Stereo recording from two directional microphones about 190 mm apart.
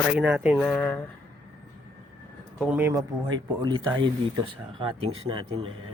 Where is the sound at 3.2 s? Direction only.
20° right (ahead or behind).